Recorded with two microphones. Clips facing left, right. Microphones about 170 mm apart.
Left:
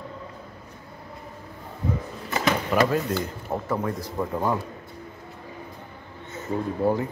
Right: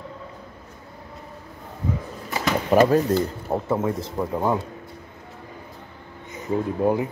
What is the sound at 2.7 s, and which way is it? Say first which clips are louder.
Speech: right 8 dB; 40° right (ahead or behind).